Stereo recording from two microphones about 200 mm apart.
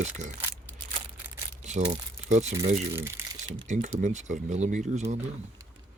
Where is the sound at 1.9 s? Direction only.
35° right (ahead or behind).